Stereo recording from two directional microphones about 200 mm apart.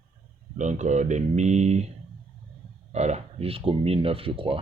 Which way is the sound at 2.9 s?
35° right (ahead or behind).